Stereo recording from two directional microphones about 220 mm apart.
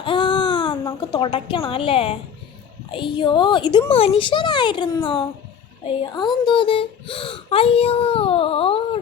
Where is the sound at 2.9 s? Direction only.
20° left (ahead or behind).